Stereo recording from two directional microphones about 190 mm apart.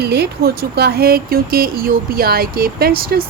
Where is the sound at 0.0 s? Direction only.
60° right (ahead or behind).